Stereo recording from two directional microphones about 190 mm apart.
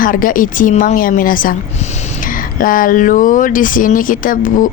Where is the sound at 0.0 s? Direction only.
45° left (ahead or behind).